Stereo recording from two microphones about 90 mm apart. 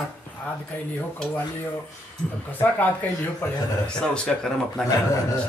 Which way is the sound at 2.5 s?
20° left (ahead or behind).